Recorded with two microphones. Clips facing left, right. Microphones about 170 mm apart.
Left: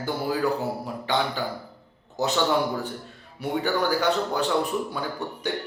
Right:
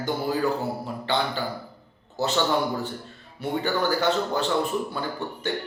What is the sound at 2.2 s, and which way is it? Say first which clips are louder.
Speech: even; 15° left (ahead or behind).